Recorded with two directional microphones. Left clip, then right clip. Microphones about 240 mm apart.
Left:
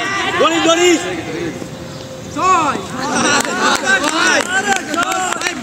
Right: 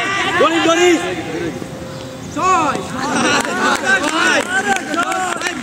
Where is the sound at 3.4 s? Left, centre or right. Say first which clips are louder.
Left 1 dB; left.